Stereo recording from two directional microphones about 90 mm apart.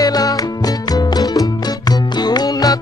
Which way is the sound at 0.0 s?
45° left (ahead or behind).